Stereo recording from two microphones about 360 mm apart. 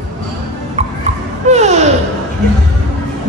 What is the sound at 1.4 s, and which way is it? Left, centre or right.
Babbling, centre.